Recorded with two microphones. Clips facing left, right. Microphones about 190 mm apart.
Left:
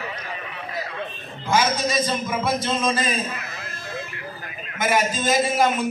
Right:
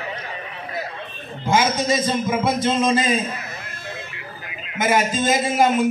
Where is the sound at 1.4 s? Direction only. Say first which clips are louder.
Right 2 dB; 25° right (ahead or behind).